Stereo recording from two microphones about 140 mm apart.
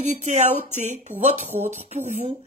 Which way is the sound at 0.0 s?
55° right (ahead or behind).